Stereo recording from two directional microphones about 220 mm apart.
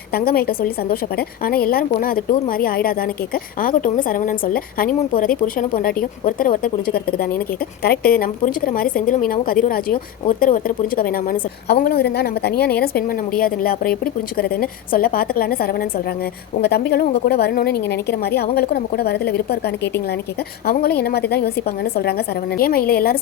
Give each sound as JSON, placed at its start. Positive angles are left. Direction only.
{"t": 0.1, "sound": "a woman's voice", "side_deg": 45}
{"t": 21.0, "sound": "a woman's voice", "side_deg": 45}